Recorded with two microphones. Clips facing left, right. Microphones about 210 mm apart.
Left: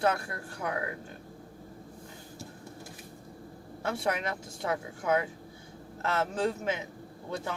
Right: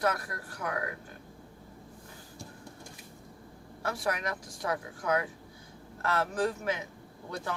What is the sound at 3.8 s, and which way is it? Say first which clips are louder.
Speech: left 2 dB; 25° left (ahead or behind).